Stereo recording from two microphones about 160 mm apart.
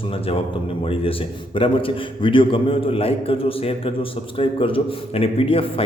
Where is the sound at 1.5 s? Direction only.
35° left (ahead or behind).